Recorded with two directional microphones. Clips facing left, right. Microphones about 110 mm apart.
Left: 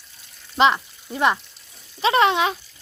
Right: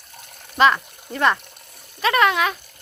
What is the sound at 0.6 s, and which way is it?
Speech, 15° left (ahead or behind).